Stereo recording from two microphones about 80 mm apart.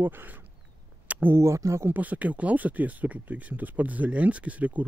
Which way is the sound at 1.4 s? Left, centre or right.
Right.